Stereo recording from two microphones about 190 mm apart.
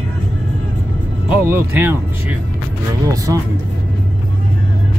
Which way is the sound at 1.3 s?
10° right (ahead or behind).